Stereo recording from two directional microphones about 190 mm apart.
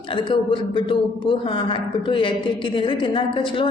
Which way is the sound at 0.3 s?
25° left (ahead or behind).